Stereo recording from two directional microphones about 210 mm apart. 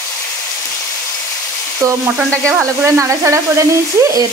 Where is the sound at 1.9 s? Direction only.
10° right (ahead or behind).